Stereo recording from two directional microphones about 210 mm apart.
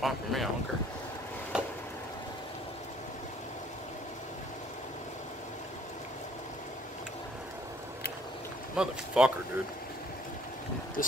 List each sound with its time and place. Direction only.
0.0 s speech: centre (ahead or behind)
1.5 s a sound: 5° right (ahead or behind)
8.7 s speech: 5° right (ahead or behind)
11.0 s speech: 40° left (ahead or behind)